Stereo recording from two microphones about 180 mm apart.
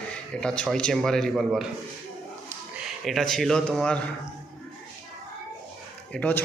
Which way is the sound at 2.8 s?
Centre (ahead or behind).